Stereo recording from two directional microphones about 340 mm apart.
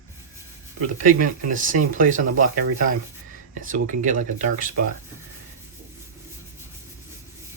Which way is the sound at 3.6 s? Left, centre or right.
Right.